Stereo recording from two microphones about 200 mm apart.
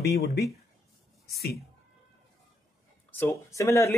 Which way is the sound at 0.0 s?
55° left (ahead or behind).